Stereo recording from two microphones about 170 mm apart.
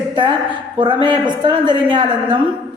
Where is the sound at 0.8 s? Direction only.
30° right (ahead or behind).